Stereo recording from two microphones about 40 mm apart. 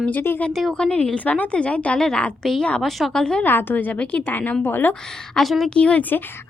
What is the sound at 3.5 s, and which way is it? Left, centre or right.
A woman's voice, left.